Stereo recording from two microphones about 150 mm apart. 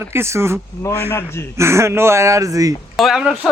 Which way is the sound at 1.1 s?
15° left (ahead or behind).